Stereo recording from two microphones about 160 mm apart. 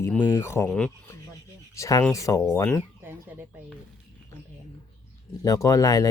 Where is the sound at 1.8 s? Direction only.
20° left (ahead or behind).